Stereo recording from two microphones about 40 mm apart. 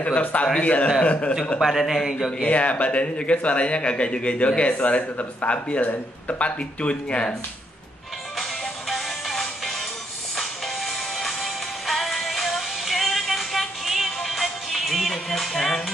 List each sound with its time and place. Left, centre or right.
0.0 s speech: left
1.6 s a man's voice: centre
2.4 s speech: left
4.7 s speech: left
8.4 s music: centre